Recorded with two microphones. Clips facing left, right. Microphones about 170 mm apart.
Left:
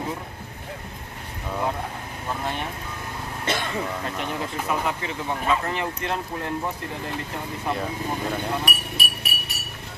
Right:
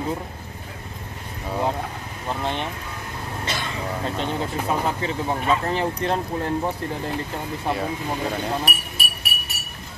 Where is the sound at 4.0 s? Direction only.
30° right (ahead or behind).